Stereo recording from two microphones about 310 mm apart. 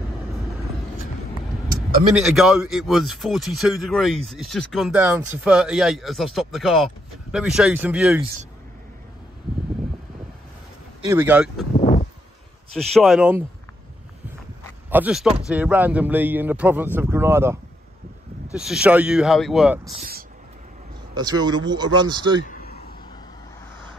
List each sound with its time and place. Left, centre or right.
2.1 s speech: centre
11.1 s speech: centre
11.8 s a sound: centre
12.7 s speech: centre
14.9 s speech: centre
21.2 s speech: centre
22.5 s a sound: left